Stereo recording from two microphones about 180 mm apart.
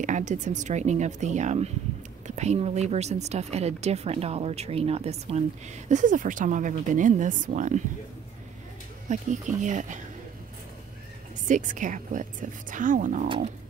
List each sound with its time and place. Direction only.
0.0 s speech: 40° right (ahead or behind)
9.1 s a woman's voice: 45° right (ahead or behind)
11.4 s a woman's voice: 45° right (ahead or behind)